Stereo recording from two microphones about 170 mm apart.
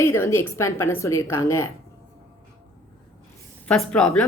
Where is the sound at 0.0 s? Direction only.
15° left (ahead or behind).